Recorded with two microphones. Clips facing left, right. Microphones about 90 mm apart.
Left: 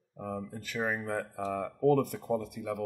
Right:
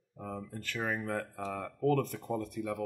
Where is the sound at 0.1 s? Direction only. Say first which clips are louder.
Left 3 dB; 10° left (ahead or behind).